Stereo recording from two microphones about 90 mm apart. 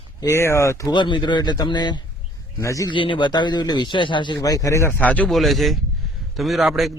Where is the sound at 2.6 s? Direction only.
35° left (ahead or behind).